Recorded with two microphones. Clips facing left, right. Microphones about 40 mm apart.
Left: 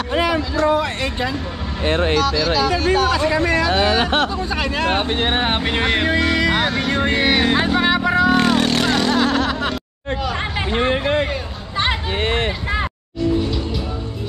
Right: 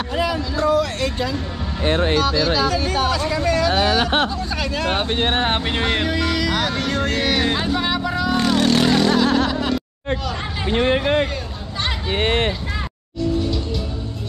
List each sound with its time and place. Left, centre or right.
0.1 s a sound: left
0.7 s speech: left
2.2 s speech: centre
2.7 s speech: centre
6.0 s speech: left
8.5 s vehicle: centre
9.0 s a sound: centre
9.5 s music: left
12.1 s speech: right